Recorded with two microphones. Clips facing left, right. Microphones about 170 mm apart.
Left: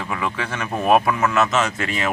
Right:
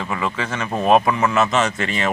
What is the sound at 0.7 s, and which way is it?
Speech, 20° right (ahead or behind).